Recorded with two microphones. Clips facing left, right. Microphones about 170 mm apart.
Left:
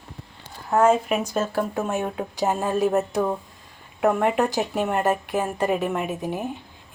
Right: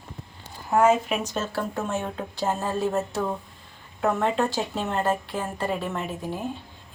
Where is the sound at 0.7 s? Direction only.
5° right (ahead or behind).